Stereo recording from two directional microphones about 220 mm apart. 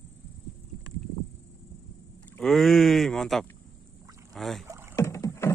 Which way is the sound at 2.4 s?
Centre (ahead or behind).